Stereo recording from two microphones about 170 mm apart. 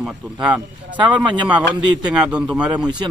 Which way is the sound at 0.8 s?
30° right (ahead or behind).